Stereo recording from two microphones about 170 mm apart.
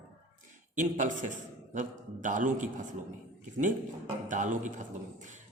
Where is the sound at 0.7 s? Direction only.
50° right (ahead or behind).